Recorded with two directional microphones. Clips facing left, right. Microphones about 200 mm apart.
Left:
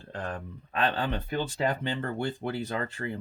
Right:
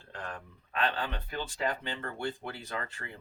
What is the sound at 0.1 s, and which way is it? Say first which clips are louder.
Speech: left 6 dB; 30° left (ahead or behind).